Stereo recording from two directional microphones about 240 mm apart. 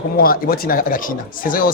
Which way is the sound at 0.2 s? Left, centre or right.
Left.